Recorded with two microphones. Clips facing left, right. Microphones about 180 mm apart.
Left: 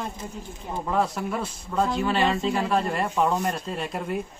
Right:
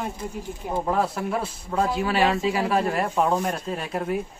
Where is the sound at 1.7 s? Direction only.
5° right (ahead or behind).